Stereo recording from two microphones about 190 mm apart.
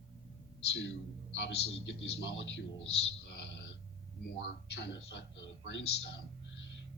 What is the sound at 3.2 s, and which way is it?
Whispering, 65° left (ahead or behind).